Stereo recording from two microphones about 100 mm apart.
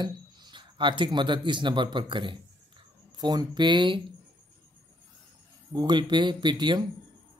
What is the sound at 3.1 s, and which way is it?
Speech, 40° right (ahead or behind).